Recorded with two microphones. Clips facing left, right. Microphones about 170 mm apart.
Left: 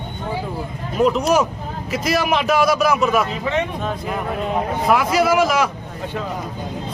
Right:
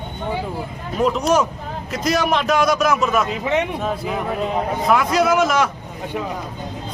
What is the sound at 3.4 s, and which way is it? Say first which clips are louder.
Speech: right 1 dB; 20° right (ahead or behind).